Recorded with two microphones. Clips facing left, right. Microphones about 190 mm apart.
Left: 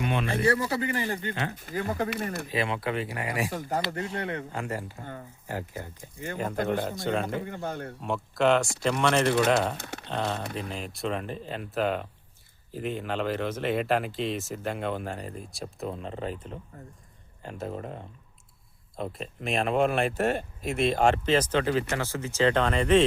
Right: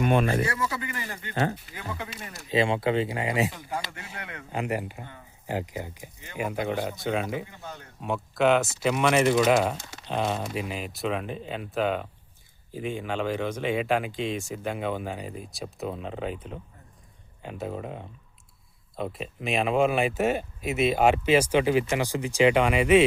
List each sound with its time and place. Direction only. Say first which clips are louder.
0.0 s speech: right 6 dB; 45° right (ahead or behind)
0.4 s speech: left 5 dB; 30° left (ahead or behind)
1.5 s speech: left 7 dB; 45° left (ahead or behind)
2.0 s speech: left 10 dB; 60° left (ahead or behind)
2.5 s speech: right 8 dB; 25° right (ahead or behind)
3.5 s speech: left 5 dB; 40° left (ahead or behind)
4.1 s speech: left 9 dB; 30° left (ahead or behind)
4.5 s speech: right 4 dB; 15° right (ahead or behind)
7.4 s speech: left 8 dB; 55° left (ahead or behind)
8.0 s speech: right 1 dB; centre (ahead or behind)
9.7 s speech: left 4 dB; 60° left (ahead or behind)
10.1 s speech: right 3 dB; 15° right (ahead or behind)